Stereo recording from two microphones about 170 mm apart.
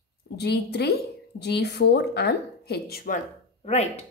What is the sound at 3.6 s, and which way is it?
Speech, 40° left (ahead or behind).